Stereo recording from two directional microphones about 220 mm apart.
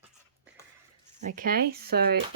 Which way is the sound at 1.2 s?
35° right (ahead or behind).